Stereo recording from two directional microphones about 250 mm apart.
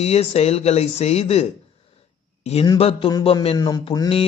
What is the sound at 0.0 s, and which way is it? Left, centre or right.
A man's voice, left.